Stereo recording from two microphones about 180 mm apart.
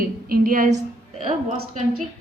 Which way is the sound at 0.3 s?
50° right (ahead or behind).